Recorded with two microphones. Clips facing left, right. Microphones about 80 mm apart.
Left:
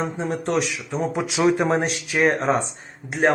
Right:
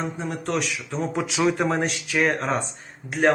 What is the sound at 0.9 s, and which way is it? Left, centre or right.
Speech, centre.